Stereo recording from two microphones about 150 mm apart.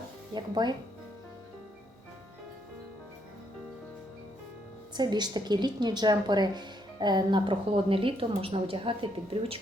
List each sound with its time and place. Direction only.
0.3 s speech: 30° right (ahead or behind)
4.9 s speech: 30° right (ahead or behind)